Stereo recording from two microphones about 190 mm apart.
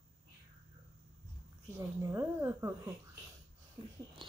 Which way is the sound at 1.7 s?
15° right (ahead or behind).